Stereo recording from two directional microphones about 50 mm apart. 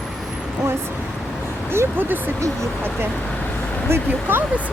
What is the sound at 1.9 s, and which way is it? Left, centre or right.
Speech, right.